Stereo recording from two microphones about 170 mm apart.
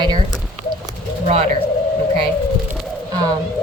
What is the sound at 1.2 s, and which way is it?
Speech, 40° right (ahead or behind).